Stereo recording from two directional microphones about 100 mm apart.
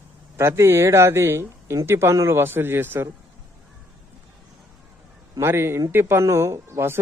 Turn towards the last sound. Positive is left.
turn(degrees=-25)  # may be behind; listen again after turning